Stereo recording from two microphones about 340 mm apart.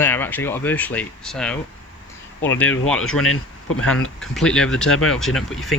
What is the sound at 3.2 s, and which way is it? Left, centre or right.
Speech, left.